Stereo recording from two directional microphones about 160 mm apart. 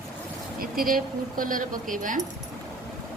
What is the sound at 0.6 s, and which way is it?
Speech, 60° right (ahead or behind).